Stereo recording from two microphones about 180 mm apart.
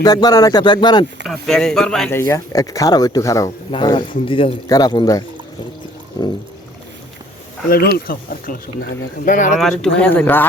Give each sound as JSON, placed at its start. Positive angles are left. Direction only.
{"t": 0.0, "sound": "a man's voice", "side_deg": 20}
{"t": 1.3, "sound": "speech", "side_deg": 5}
{"t": 2.1, "sound": "a man's voice", "side_deg": 15}
{"t": 7.9, "sound": "speech", "side_deg": 55}
{"t": 9.6, "sound": "speech", "side_deg": 0}